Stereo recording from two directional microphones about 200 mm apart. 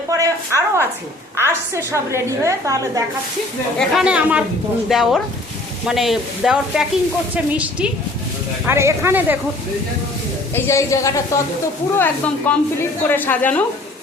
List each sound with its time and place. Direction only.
0.1 s a woman's voice: 15° right (ahead or behind)
3.8 s a woman's voice: 5° right (ahead or behind)
10.5 s a woman's voice: 15° left (ahead or behind)